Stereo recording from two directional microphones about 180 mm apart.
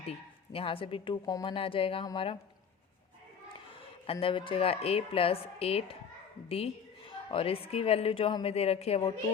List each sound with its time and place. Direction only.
0.1 s a woman's voice: 30° left (ahead or behind)
4.0 s a woman's voice: 30° left (ahead or behind)